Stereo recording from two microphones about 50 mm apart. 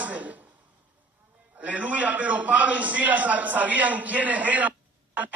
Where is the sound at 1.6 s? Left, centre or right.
Right.